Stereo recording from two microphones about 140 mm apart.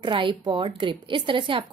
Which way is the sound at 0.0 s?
35° right (ahead or behind).